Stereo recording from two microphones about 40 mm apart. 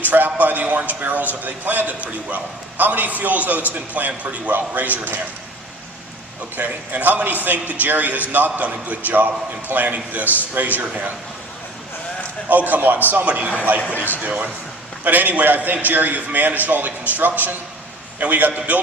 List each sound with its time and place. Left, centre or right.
0.0 s a man's voice: right
6.6 s a man's voice: right
12.5 s a man's voice: right
13.9 s speech: left
14.2 s a man's voice: right